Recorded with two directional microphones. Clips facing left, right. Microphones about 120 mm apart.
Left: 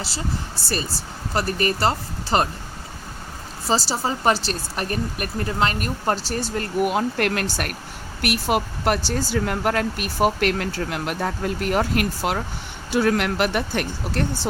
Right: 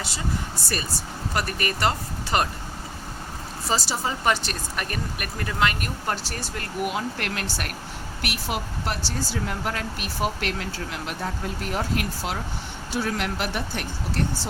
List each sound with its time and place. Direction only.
0.0 s speech: 30° left (ahead or behind)
3.7 s speech: 30° left (ahead or behind); by 14.3 s 65° left (ahead or behind)